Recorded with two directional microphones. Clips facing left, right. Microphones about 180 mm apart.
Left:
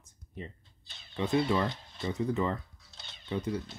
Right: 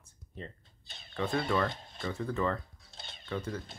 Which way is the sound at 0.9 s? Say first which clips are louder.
Right 3 dB; 50° right (ahead or behind).